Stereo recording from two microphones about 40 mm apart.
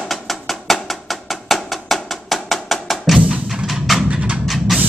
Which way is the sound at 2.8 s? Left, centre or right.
Centre.